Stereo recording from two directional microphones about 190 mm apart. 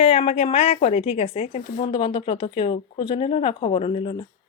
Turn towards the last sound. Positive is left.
turn(degrees=30)  # may be behind; listen again after turning